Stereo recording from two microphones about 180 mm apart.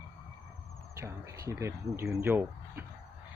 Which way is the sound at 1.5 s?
15° right (ahead or behind).